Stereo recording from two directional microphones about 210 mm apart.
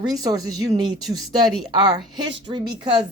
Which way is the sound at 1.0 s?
Centre (ahead or behind).